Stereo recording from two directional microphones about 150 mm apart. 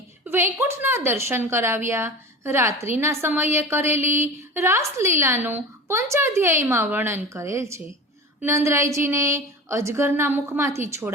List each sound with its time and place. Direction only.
0.3 s a woman's voice: 15° right (ahead or behind)